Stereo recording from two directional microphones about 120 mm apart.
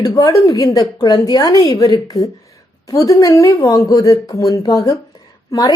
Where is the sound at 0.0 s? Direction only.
30° left (ahead or behind).